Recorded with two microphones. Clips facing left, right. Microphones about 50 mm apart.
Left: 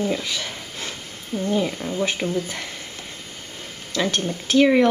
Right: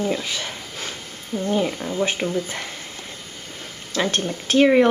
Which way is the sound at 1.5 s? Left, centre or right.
Centre.